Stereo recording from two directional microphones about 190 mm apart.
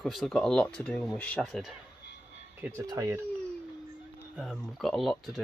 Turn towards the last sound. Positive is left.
turn(degrees=0)  # may be behind; listen again after turning